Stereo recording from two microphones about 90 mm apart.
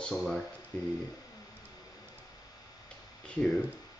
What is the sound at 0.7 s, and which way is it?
Speech, 20° left (ahead or behind).